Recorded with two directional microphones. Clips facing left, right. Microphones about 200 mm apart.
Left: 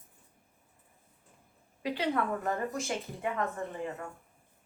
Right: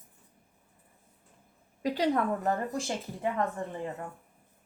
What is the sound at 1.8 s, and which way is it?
Speech, 40° right (ahead or behind).